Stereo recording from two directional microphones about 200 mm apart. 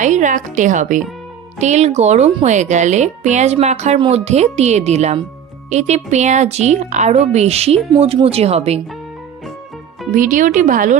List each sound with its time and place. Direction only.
0.0 s speech: 40° right (ahead or behind)
10.2 s speech: 40° right (ahead or behind)